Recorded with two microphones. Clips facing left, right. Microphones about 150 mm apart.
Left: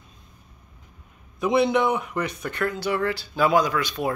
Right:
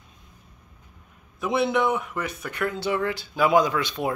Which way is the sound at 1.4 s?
Centre (ahead or behind).